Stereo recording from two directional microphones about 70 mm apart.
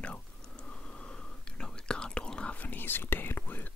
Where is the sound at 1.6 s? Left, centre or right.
Centre.